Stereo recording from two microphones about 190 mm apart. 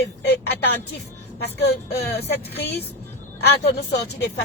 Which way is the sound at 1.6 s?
60° left (ahead or behind).